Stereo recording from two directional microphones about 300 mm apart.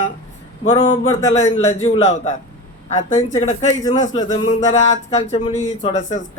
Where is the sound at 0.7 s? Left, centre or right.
Centre.